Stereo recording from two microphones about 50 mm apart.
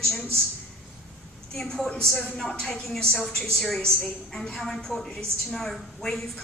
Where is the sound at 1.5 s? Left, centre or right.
Centre.